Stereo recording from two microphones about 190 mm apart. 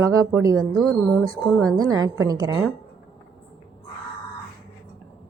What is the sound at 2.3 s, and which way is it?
Speech, 20° right (ahead or behind).